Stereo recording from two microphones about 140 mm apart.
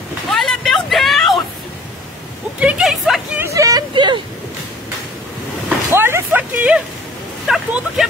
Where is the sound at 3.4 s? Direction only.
20° right (ahead or behind).